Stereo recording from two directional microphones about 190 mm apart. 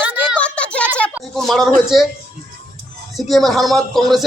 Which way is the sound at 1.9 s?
Centre (ahead or behind).